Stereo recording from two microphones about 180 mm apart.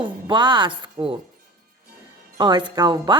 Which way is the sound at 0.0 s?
25° right (ahead or behind).